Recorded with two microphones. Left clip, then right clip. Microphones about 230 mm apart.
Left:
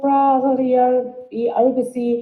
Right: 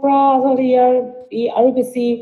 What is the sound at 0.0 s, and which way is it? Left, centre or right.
A woman's voice, right.